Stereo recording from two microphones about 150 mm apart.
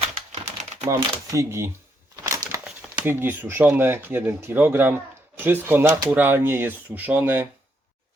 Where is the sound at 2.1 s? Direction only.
20° right (ahead or behind).